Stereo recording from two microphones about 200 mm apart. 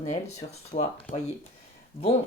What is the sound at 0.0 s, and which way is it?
Speech, 35° left (ahead or behind).